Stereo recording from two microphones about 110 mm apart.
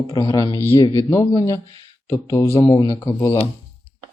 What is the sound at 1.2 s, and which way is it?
Speech, 60° left (ahead or behind).